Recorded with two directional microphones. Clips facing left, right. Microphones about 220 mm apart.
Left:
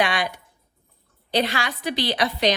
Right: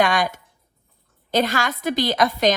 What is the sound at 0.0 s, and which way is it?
A woman's voice, 45° right (ahead or behind).